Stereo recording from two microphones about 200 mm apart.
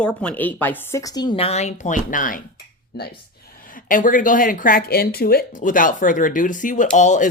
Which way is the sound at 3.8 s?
40° left (ahead or behind).